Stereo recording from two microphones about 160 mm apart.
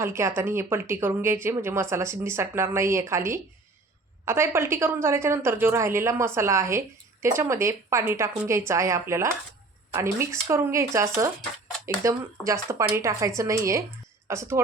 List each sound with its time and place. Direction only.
0.0 s a woman's voice: 15° right (ahead or behind)